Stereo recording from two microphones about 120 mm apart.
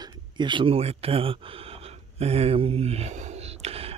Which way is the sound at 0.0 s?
35° right (ahead or behind).